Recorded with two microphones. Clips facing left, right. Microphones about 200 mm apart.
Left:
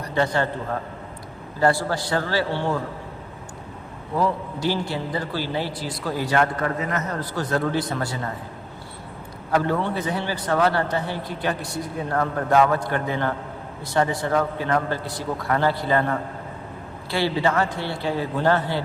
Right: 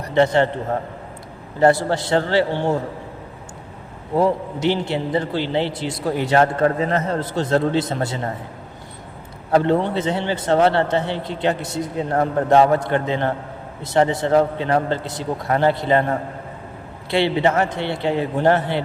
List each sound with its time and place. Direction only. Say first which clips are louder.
0.0 s a man's voice: right 6 dB; 25° right (ahead or behind)
4.1 s a man's voice: right 5 dB; 25° right (ahead or behind)
9.5 s a man's voice: right 5 dB; 25° right (ahead or behind)